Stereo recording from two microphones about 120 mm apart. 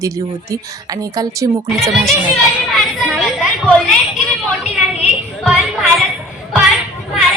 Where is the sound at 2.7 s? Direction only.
Centre (ahead or behind).